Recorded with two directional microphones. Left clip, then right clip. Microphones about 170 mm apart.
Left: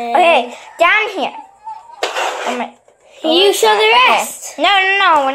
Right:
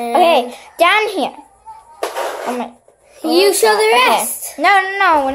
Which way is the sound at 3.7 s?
10° right (ahead or behind).